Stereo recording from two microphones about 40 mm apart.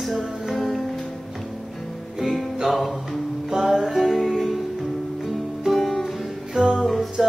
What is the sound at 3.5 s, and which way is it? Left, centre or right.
Music, centre.